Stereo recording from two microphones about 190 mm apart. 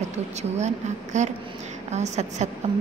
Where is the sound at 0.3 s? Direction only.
35° right (ahead or behind).